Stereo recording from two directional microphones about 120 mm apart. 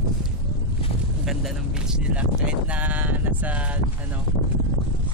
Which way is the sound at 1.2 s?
Centre (ahead or behind).